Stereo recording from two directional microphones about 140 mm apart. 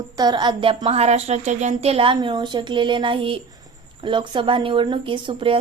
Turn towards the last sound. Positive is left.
turn(degrees=-40)  # may be behind; listen again after turning